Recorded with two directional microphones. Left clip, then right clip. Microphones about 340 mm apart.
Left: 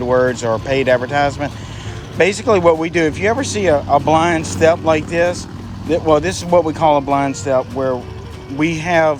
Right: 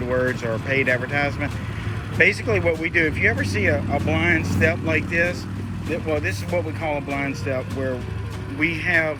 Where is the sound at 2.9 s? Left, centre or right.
Left.